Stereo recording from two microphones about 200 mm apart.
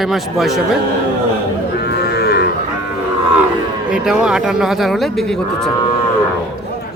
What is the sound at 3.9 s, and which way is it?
Speech, 5° right (ahead or behind).